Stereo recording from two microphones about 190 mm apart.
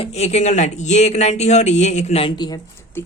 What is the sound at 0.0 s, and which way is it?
Speech, 35° left (ahead or behind).